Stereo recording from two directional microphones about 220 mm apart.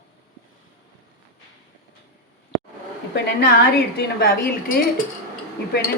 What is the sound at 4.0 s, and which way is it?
Speech, 45° left (ahead or behind).